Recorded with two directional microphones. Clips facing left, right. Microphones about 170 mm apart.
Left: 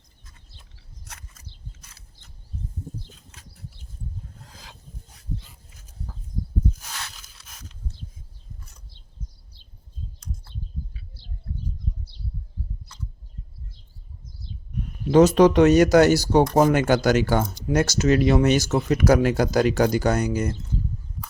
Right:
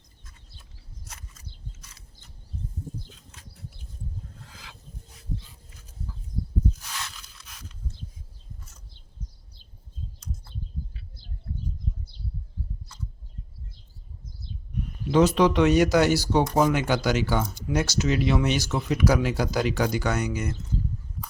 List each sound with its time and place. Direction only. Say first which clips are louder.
1.0 s a sound: left 1 dB; 60° left (ahead or behind)
4.4 s rub: left 1 dB; 35° left (ahead or behind)
15.1 s speech: left 5 dB; 45° left (ahead or behind)